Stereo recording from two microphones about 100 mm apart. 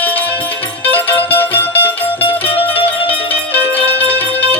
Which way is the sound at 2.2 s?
65° left (ahead or behind).